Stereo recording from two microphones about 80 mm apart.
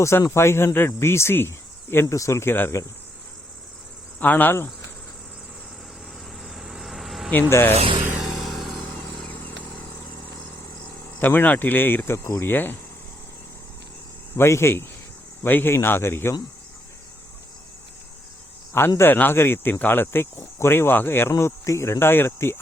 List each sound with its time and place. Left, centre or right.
0.0 s speech: left
4.2 s speech: left
6.4 s cricket: centre
7.5 s speech: left
8.2 s vehicle: centre
11.2 s speech: left
14.3 s speech: left
18.9 s speech: left